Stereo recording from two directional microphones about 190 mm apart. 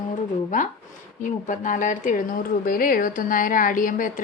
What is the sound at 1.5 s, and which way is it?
A woman's voice, 40° left (ahead or behind).